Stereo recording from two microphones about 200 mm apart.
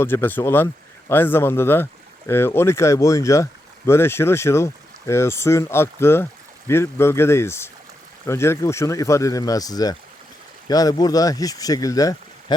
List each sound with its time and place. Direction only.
0.0 s speech: 10° left (ahead or behind)